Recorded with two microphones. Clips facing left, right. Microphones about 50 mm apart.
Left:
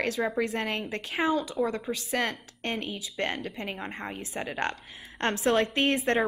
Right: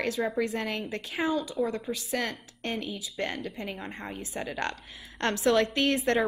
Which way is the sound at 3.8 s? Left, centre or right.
Left.